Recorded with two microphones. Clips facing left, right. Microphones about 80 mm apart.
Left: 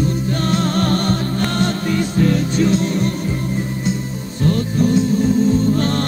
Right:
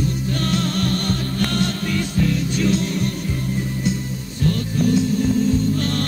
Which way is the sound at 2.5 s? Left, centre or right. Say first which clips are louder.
Left 4 dB; left.